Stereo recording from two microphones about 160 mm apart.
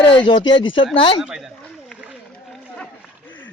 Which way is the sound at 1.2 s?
5° right (ahead or behind).